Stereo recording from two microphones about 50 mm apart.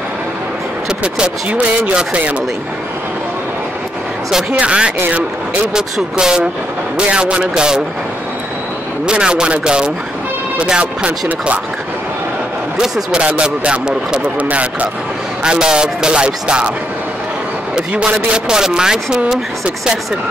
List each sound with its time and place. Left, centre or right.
0.8 s speech: centre
4.5 s speech: right
9.0 s speech: centre
12.8 s speech: centre
13.4 s speech: right
15.4 s speech: centre
17.9 s speech: centre